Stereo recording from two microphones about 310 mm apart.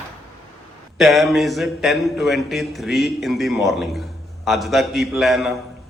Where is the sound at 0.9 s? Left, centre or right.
Centre.